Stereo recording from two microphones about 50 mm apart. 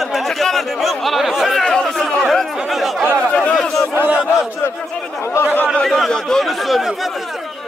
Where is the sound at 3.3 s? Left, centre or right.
Left.